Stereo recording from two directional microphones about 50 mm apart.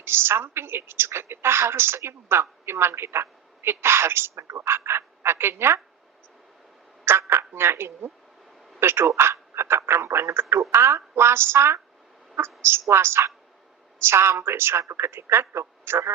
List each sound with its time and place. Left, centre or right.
0.0 s a woman's voice: right
7.0 s a woman's voice: right
12.9 s a woman's voice: right